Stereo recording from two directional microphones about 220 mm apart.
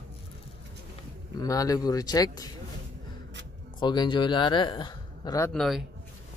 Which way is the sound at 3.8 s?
20° left (ahead or behind).